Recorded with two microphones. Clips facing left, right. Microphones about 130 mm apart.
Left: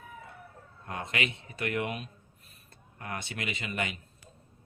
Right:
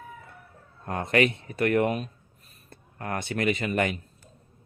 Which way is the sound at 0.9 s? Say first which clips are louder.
Right 10 dB; 45° right (ahead or behind).